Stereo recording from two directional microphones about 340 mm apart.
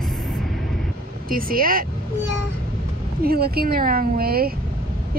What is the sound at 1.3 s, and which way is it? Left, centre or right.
Speech, right.